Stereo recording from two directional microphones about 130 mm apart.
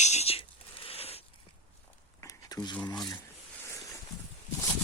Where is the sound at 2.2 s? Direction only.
30° left (ahead or behind).